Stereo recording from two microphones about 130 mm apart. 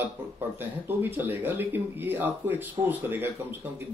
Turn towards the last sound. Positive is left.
turn(degrees=-15)  # may be behind; listen again after turning